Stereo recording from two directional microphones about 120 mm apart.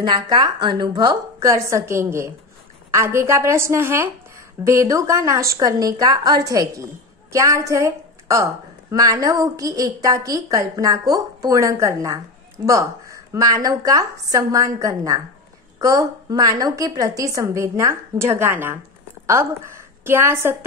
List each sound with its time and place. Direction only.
0.0 s a woman's voice: 35° right (ahead or behind); by 20.5 s 20° right (ahead or behind)